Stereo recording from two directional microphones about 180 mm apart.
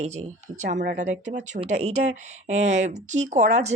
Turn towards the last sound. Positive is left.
turn(degrees=-40)  # may be behind; listen again after turning